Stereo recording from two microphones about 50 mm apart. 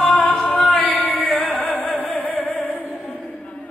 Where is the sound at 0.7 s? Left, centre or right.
Left.